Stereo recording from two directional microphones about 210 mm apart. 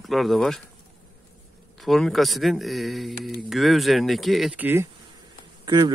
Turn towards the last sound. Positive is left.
turn(degrees=-20)  # may be behind; listen again after turning